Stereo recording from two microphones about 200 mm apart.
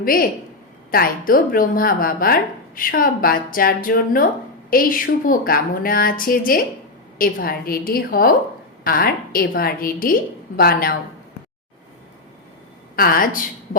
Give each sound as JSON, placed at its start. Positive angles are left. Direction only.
{"t": 0.0, "sound": "a woman's voice", "side_deg": 45}
{"t": 13.0, "sound": "a woman's voice", "side_deg": 45}